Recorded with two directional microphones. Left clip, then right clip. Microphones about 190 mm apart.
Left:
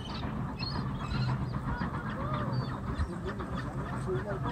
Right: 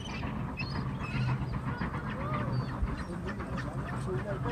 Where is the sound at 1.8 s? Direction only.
10° right (ahead or behind).